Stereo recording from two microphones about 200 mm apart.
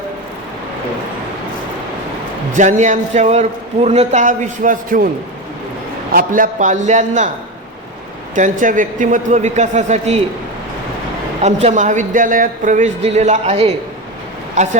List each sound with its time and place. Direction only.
2.6 s speech: 35° right (ahead or behind)
6.1 s speech: 40° right (ahead or behind)
8.4 s speech: 40° right (ahead or behind)
11.4 s speech: 35° right (ahead or behind)